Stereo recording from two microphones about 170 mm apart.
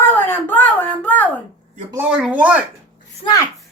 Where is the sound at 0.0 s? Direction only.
15° left (ahead or behind).